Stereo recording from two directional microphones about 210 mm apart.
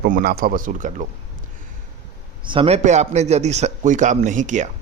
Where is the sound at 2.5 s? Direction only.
25° right (ahead or behind).